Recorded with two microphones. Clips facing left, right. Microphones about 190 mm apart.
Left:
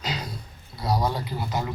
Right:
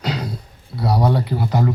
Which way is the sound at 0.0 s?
65° right (ahead or behind).